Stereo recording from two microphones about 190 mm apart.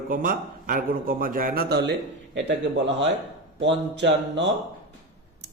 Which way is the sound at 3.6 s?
65° right (ahead or behind).